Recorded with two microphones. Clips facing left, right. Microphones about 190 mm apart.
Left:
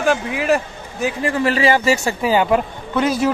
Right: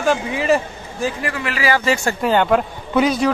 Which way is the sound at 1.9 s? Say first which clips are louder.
Left 1 dB; 5° left (ahead or behind).